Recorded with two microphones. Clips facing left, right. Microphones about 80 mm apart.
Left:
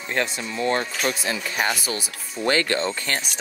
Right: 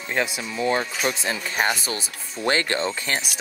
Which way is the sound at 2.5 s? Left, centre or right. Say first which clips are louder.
Left 1 dB; right.